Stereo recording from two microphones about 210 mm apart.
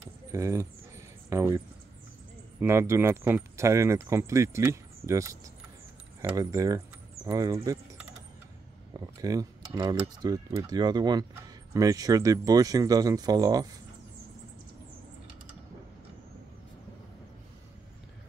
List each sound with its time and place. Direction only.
0.3 s a sound: 15° right (ahead or behind)
2.6 s speech: 10° right (ahead or behind)
8.9 s speech: 20° right (ahead or behind)